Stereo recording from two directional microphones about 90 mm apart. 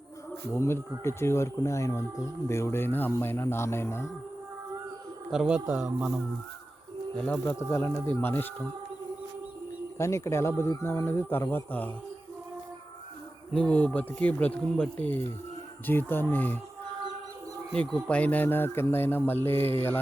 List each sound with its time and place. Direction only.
0.5 s speech: 30° left (ahead or behind)
5.3 s a man's voice: 10° right (ahead or behind)
7.2 s speech: 20° left (ahead or behind)
7.7 s speech: 35° left (ahead or behind)
8.2 s speech: 25° left (ahead or behind)
10.0 s speech: 30° left (ahead or behind)
13.5 s speech: 10° left (ahead or behind)
17.7 s speech: 10° left (ahead or behind)